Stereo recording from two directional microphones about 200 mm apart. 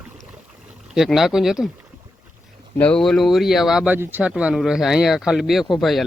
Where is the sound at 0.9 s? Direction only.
Centre (ahead or behind).